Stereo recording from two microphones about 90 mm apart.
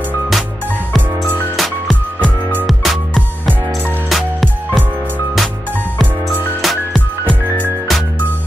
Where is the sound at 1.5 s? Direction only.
Centre (ahead or behind).